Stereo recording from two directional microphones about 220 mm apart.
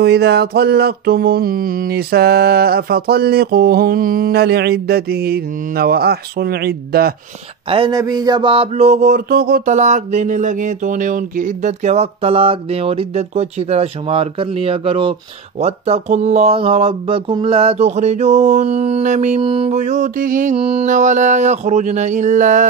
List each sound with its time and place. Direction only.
0.0 s mantra: 50° right (ahead or behind)
7.7 s mantra: 20° right (ahead or behind)
15.6 s a sound: 30° right (ahead or behind)